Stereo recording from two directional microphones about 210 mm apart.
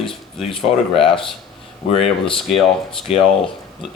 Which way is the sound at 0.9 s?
25° left (ahead or behind).